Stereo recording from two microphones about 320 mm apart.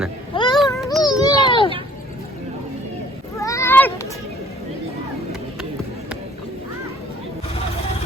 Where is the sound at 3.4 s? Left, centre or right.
Centre.